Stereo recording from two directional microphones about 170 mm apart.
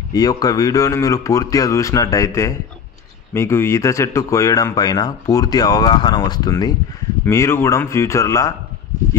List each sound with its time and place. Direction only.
0.1 s speech: 20° left (ahead or behind)